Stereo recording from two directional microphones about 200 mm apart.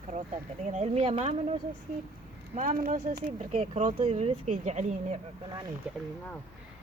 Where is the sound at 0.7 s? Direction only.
35° right (ahead or behind).